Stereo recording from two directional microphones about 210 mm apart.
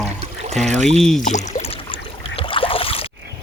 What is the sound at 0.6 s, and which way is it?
Speech, 35° right (ahead or behind).